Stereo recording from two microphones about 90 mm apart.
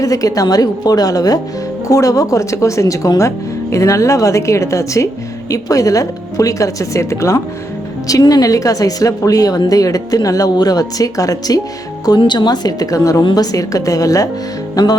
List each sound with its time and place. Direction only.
0.0 s speech: 40° left (ahead or behind)
12.2 s speech: 60° left (ahead or behind); by 14.3 s 40° left (ahead or behind)